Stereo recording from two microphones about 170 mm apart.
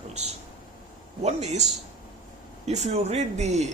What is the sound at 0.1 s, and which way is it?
Speech, 40° right (ahead or behind).